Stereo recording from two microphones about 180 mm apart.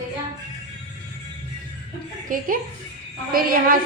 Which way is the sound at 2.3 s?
50° right (ahead or behind).